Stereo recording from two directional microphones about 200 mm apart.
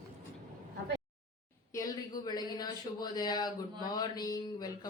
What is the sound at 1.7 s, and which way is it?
Speech, 20° left (ahead or behind).